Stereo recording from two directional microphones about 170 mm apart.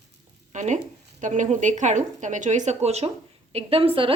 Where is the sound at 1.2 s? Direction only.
45° right (ahead or behind).